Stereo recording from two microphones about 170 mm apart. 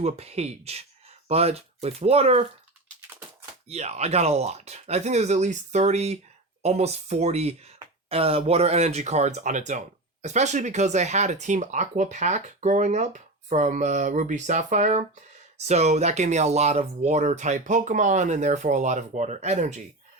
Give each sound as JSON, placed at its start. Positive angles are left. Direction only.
{"t": 0.0, "sound": "speech", "side_deg": -40}
{"t": 3.7, "sound": "speech", "side_deg": -40}